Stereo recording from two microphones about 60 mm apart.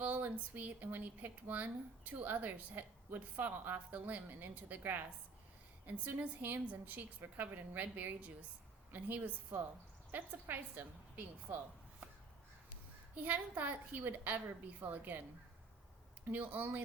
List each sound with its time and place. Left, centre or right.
0.0 s a woman's voice: right
13.1 s a woman's voice: right
16.3 s speech: right